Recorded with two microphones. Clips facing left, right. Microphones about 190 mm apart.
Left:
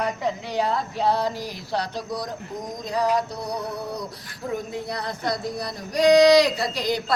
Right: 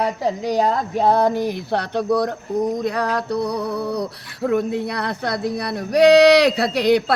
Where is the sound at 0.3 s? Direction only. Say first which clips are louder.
Right 7 dB; 40° right (ahead or behind).